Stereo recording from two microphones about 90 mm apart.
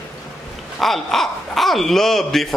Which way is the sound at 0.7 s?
Centre (ahead or behind).